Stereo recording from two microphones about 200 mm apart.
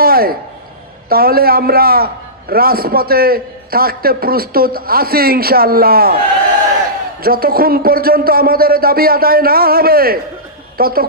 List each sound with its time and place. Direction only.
0.0 s a man's voice: 50° right (ahead or behind)
7.2 s a man's voice: 50° right (ahead or behind)